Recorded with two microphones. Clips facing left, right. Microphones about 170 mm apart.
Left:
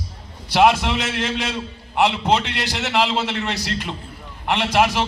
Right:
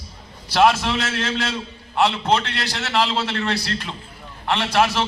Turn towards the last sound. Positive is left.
turn(degrees=15)  # may be behind; listen again after turning